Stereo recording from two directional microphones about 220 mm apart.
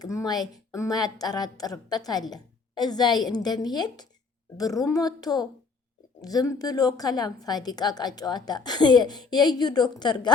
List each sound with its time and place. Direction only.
0.0 s a woman's voice: 15° left (ahead or behind)